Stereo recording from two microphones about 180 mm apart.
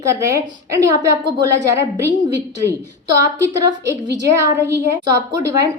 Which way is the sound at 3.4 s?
15° right (ahead or behind).